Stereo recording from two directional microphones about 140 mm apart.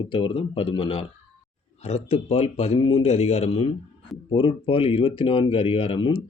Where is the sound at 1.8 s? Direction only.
50° left (ahead or behind).